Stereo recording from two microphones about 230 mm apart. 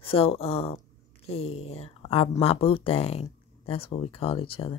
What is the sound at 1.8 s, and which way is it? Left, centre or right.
A woman's voice, left.